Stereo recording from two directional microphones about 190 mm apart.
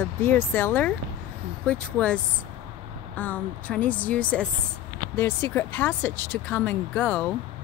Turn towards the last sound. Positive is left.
turn(degrees=10)  # may be behind; listen again after turning